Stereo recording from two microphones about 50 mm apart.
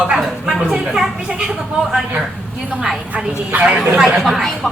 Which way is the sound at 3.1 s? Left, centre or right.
Right.